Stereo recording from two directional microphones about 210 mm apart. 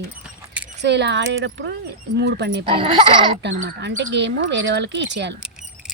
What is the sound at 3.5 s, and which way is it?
Speech, 40° right (ahead or behind).